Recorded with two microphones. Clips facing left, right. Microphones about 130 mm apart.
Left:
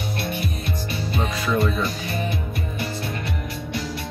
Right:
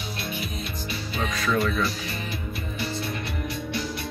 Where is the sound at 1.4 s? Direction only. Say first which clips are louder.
Left 1 dB; 20° left (ahead or behind).